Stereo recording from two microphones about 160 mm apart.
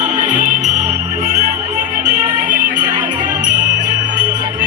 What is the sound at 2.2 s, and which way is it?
Music, 25° right (ahead or behind).